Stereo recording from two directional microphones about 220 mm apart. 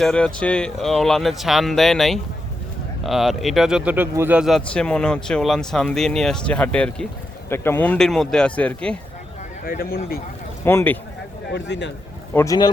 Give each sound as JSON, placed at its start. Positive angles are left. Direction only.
{"t": 0.0, "sound": "speech", "side_deg": 5}
{"t": 9.6, "sound": "a man's voice", "side_deg": 40}
{"t": 10.7, "sound": "speech", "side_deg": 10}
{"t": 11.5, "sound": "a man's voice", "side_deg": 50}
{"t": 12.3, "sound": "speech", "side_deg": 10}